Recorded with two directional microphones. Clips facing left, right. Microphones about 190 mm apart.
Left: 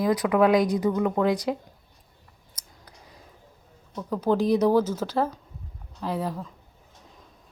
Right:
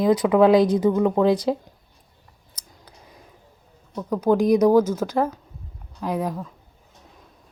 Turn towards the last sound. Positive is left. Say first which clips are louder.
# right 3 dB
turn(degrees=-15)  # may be behind; listen again after turning